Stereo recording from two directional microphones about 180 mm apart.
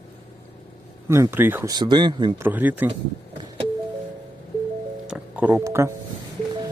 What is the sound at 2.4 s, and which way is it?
Speech, 10° right (ahead or behind).